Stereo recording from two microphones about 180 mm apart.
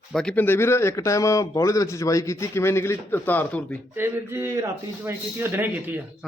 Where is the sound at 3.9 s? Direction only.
15° right (ahead or behind).